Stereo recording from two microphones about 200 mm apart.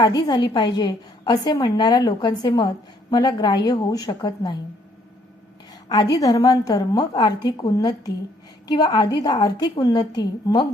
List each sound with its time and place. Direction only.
0.0 s a woman's voice: 20° left (ahead or behind)
5.9 s a woman's voice: 20° left (ahead or behind)